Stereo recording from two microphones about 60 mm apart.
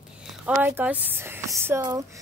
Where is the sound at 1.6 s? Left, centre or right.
Right.